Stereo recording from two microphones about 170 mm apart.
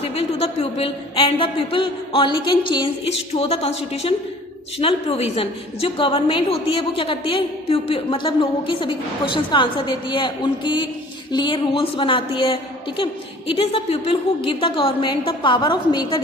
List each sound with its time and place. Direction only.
0.0 s a woman's voice: 35° left (ahead or behind)